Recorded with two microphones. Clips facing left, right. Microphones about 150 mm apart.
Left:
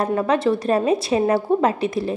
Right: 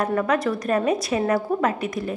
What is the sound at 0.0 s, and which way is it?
A woman's voice, 30° left (ahead or behind).